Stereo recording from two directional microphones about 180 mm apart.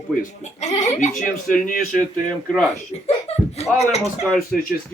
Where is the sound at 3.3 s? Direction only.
35° left (ahead or behind).